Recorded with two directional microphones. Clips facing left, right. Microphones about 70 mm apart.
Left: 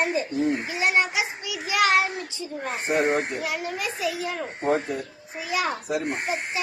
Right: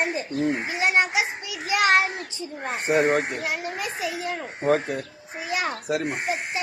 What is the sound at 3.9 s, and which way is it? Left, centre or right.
Speech, right.